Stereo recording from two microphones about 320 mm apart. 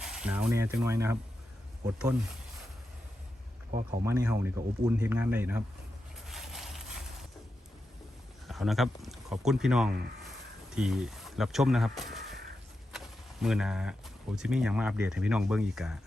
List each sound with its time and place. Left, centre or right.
0.0 s speech: centre
3.7 s speech: right
4.0 s speech: centre
6.2 s a sound: centre
8.4 s speech: centre
13.4 s speech: centre